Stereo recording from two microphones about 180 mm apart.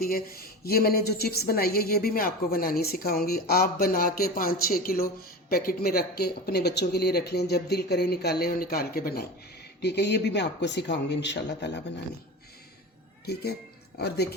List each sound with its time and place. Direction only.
0.0 s a woman's voice: 55° left (ahead or behind)
9.8 s speech: 70° left (ahead or behind)
13.2 s a woman's voice: 60° left (ahead or behind)